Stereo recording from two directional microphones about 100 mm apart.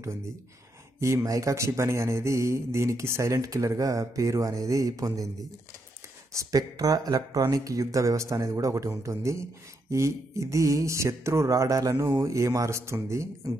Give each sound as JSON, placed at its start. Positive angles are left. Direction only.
{"t": 0.9, "sound": "speech", "side_deg": -30}